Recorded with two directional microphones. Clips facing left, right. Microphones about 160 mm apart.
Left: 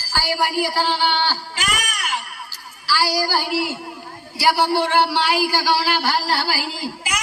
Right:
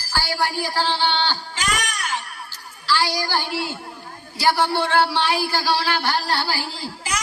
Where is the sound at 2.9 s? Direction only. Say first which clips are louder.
Left 2 dB; 5° left (ahead or behind).